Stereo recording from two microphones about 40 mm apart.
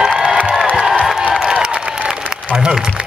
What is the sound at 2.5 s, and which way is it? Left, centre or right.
Speech, centre.